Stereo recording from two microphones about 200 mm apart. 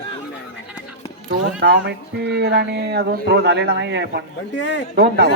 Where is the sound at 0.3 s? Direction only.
5° right (ahead or behind).